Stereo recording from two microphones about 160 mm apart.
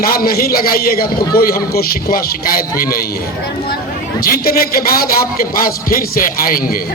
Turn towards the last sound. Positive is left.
turn(degrees=65)  # may be behind; listen again after turning